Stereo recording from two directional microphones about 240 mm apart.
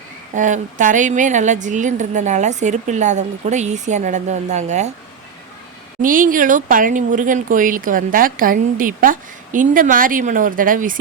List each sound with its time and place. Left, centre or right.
0.3 s a woman's voice: right
6.0 s speech: right